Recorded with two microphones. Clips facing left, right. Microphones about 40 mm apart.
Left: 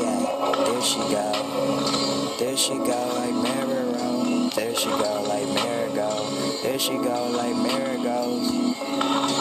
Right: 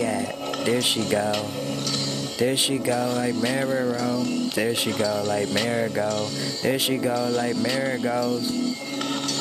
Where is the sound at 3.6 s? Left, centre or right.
Right.